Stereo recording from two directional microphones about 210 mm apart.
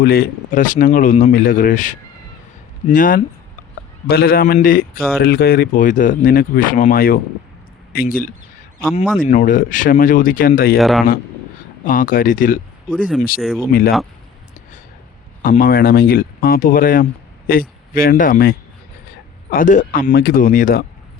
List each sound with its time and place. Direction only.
0.0 s a man's voice: 45° left (ahead or behind)
10.8 s speech: centre (ahead or behind)
11.9 s a man's voice: 40° left (ahead or behind)
13.4 s speech: centre (ahead or behind)
13.7 s a man's voice: 45° left (ahead or behind)
15.4 s a man's voice: 40° left (ahead or behind)